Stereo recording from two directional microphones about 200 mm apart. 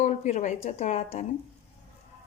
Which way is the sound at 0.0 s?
35° left (ahead or behind).